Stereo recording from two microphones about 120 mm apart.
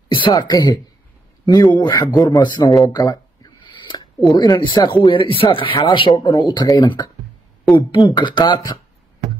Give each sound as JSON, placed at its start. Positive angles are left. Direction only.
{"t": 0.1, "sound": "a woman's voice", "side_deg": 40}
{"t": 2.8, "sound": "a sound", "side_deg": 30}
{"t": 4.3, "sound": "speech", "side_deg": 35}